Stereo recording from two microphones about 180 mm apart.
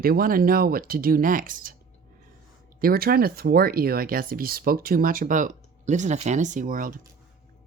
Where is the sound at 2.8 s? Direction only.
55° right (ahead or behind).